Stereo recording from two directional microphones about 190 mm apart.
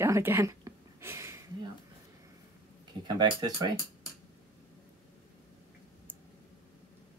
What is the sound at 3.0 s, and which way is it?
Speech, 25° right (ahead or behind).